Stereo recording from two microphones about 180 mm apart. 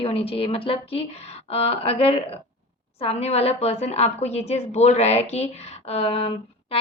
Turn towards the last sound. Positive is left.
turn(degrees=30)  # may be behind; listen again after turning